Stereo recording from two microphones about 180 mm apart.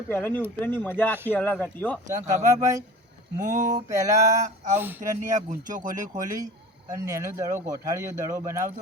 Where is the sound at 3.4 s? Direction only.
45° right (ahead or behind).